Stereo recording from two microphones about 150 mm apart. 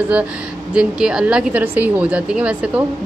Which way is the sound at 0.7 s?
5° right (ahead or behind).